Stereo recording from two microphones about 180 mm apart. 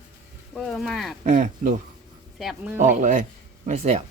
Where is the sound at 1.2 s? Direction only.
45° right (ahead or behind).